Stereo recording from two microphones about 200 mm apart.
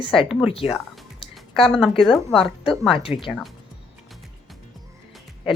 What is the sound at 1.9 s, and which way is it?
Speech, 25° left (ahead or behind).